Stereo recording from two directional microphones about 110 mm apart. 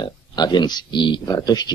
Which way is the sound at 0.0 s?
40° left (ahead or behind).